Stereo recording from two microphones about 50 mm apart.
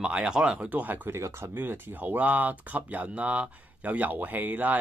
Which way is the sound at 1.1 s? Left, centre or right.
Right.